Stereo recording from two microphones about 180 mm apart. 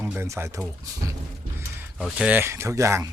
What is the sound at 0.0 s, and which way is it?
Speech, 10° right (ahead or behind).